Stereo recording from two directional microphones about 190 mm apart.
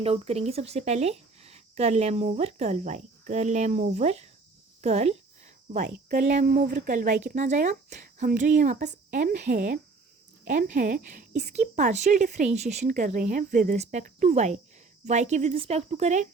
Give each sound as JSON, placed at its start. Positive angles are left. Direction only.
{"t": 0.0, "sound": "a woman's voice", "side_deg": -35}
{"t": 5.9, "sound": "a woman's voice", "side_deg": -45}